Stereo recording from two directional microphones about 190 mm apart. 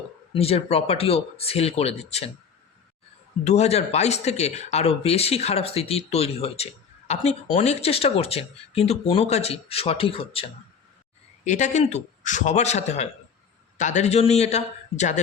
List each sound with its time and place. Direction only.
0.3 s speech: 30° left (ahead or behind)
3.4 s speech: 35° left (ahead or behind)
11.4 s speech: 40° left (ahead or behind)